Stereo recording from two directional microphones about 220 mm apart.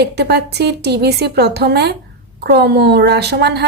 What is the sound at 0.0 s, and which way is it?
A woman's voice, 50° right (ahead or behind).